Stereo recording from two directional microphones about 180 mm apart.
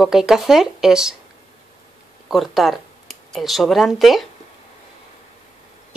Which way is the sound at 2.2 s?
Centre (ahead or behind).